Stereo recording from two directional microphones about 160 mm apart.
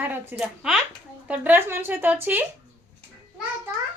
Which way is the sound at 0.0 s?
10° right (ahead or behind).